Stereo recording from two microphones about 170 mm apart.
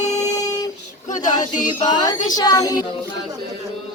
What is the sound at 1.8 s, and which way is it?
Speech, 25° left (ahead or behind).